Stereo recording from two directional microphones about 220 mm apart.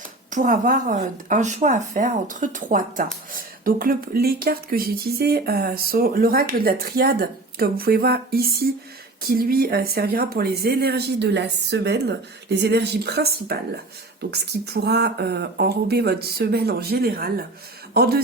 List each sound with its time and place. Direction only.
0.3 s speech: 35° right (ahead or behind)